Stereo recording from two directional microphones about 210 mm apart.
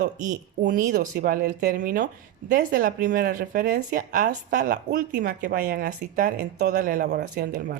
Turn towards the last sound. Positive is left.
turn(degrees=-50)  # may be behind; listen again after turning